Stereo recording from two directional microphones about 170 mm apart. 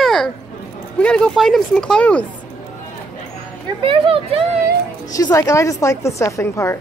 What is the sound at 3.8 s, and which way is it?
Speech, 30° right (ahead or behind).